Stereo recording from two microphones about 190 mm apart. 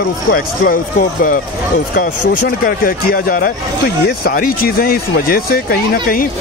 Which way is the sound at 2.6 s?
50° left (ahead or behind).